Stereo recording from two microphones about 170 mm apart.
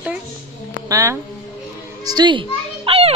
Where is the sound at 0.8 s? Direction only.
20° right (ahead or behind).